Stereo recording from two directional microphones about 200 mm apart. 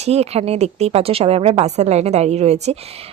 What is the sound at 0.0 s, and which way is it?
A woman's voice, 30° right (ahead or behind).